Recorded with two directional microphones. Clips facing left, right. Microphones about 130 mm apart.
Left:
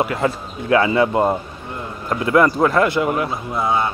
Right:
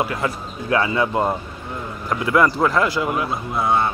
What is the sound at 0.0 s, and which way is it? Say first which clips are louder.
Speech: left 3 dB; 30° left (ahead or behind).